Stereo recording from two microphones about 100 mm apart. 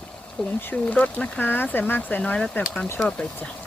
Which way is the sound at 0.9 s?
15° left (ahead or behind).